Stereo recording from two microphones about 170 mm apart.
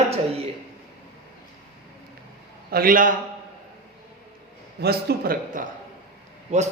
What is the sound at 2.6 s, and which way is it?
Speech, 60° right (ahead or behind).